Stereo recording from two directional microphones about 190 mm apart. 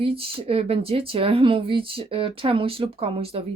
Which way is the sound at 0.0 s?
30° right (ahead or behind).